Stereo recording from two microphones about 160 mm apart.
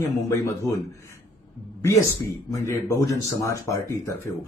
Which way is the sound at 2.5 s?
15° left (ahead or behind).